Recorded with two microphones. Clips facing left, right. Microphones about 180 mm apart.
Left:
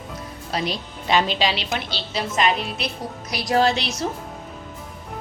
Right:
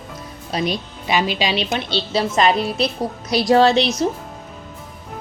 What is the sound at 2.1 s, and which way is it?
A woman's voice, 35° right (ahead or behind).